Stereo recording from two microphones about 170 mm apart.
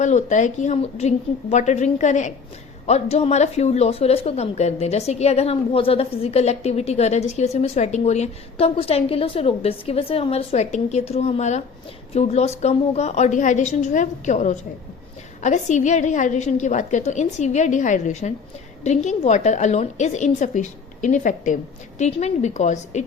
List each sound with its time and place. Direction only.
0.0 s a woman's voice: 45° left (ahead or behind)